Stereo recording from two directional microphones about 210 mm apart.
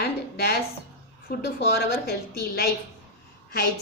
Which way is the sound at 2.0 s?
45° left (ahead or behind).